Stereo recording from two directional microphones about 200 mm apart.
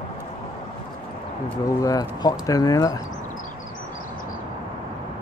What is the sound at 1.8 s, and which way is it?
Speech, 20° left (ahead or behind).